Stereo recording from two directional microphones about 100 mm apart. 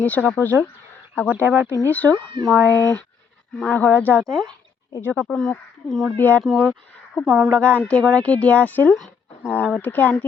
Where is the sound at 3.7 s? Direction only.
15° left (ahead or behind).